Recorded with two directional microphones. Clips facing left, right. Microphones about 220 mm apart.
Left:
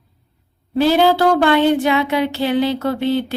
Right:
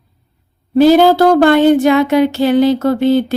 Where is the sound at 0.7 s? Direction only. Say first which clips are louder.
Right 6 dB; 45° right (ahead or behind).